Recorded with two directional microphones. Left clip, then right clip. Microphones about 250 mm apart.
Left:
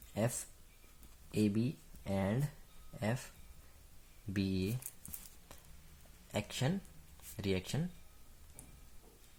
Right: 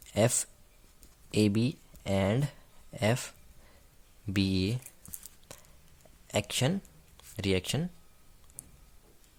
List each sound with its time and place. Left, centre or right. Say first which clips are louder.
0.1 s speech: right 10 dB; right
6.3 s speech: right 8 dB; right